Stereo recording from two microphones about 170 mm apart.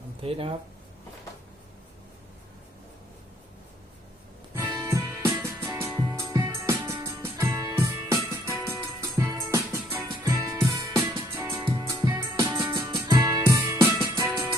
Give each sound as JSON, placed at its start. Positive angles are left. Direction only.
{"t": 0.2, "sound": "speech", "side_deg": -35}
{"t": 4.5, "sound": "music", "side_deg": -15}
{"t": 10.6, "sound": "music", "side_deg": -25}